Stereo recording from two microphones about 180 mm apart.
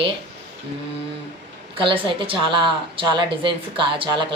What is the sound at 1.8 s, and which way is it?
A woman's voice, 30° right (ahead or behind).